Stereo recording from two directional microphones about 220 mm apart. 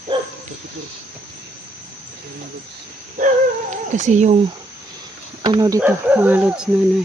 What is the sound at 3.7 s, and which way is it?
Speech, 35° right (ahead or behind).